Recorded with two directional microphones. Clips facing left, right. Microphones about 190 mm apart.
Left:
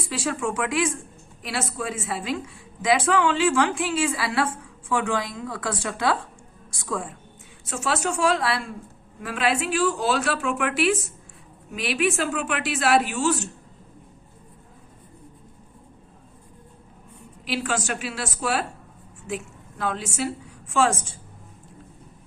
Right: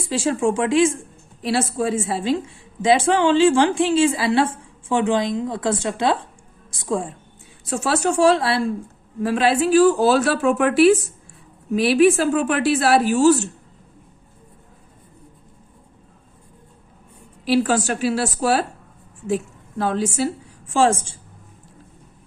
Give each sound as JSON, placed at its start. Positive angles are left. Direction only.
{"t": 0.0, "sound": "a woman's voice", "side_deg": -30}
{"t": 17.4, "sound": "a woman's voice", "side_deg": -35}
{"t": 19.8, "sound": "a woman's voice", "side_deg": -35}